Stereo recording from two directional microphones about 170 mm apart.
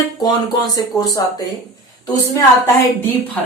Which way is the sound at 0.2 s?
20° left (ahead or behind).